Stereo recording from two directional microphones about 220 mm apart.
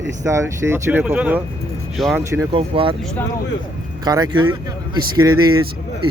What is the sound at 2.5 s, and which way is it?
Speech, 25° right (ahead or behind).